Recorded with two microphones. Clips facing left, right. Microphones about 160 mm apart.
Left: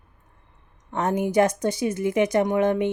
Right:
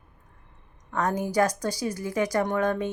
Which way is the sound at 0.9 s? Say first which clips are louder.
Left 3 dB; 25° left (ahead or behind).